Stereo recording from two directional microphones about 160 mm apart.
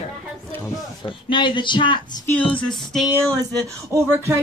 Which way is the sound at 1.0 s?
30° left (ahead or behind).